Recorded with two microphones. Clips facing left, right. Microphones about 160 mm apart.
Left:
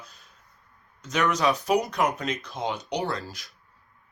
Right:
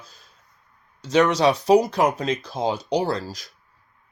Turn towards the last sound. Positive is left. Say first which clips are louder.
# right 6 dB
turn(degrees=-40)  # may be behind; listen again after turning